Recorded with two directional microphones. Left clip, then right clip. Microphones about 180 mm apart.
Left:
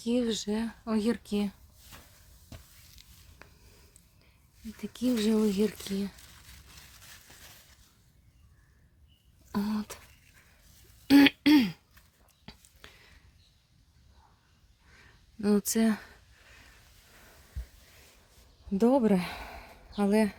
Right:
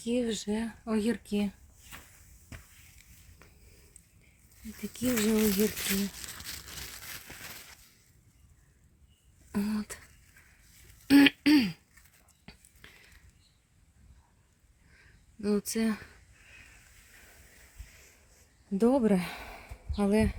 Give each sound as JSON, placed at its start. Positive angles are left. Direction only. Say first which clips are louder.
{"t": 0.0, "sound": "speech", "louder": "left 1 dB", "side_deg": 5}
{"t": 4.8, "sound": "speech", "louder": "even", "side_deg": 5}
{"t": 7.0, "sound": "a sound", "louder": "right 7 dB", "side_deg": -40}
{"t": 9.5, "sound": "speech", "louder": "left 1 dB", "side_deg": -5}
{"t": 11.1, "sound": "throat clearing", "louder": "left 1 dB", "side_deg": 0}
{"t": 12.5, "sound": "whispering", "louder": "left 2 dB", "side_deg": 0}
{"t": 12.8, "sound": "a sound", "louder": "left 1 dB", "side_deg": 10}
{"t": 14.9, "sound": "a sound", "louder": "left 4 dB", "side_deg": 15}
{"t": 18.8, "sound": "speech", "louder": "left 1 dB", "side_deg": 5}